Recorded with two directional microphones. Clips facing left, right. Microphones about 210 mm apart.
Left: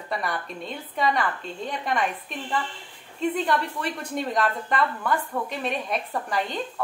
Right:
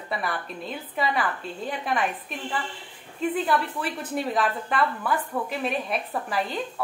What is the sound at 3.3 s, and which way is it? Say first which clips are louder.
A woman's voice: even; 5° right (ahead or behind).